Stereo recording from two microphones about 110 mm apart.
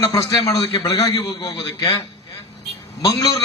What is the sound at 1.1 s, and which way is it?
Speech, 45° left (ahead or behind).